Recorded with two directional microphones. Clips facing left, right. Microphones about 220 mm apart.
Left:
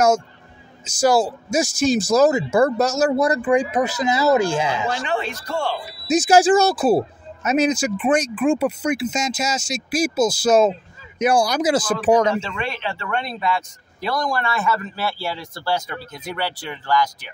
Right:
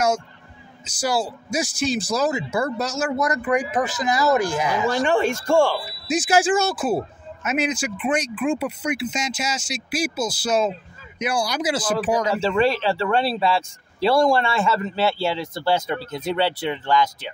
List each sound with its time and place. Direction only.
0.8 s speech: 45° left (ahead or behind)
3.1 s speech: 30° left (ahead or behind)
3.4 s speech: 15° left (ahead or behind)
5.0 s speech: 45° right (ahead or behind)
6.0 s speech: 40° left (ahead or behind)
12.4 s speech: 35° right (ahead or behind)